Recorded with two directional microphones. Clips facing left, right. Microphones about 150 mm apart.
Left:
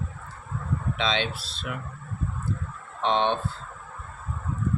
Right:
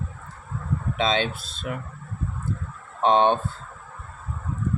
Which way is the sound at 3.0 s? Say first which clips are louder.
Right 5 dB; 45° right (ahead or behind).